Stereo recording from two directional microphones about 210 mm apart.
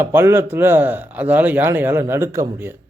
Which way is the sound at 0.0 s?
10° right (ahead or behind).